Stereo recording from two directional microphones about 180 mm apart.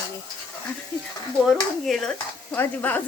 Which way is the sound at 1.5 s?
Centre (ahead or behind).